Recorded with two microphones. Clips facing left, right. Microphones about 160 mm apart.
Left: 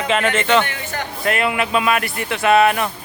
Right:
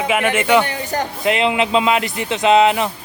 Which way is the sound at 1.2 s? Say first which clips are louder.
Right 2 dB; 20° right (ahead or behind).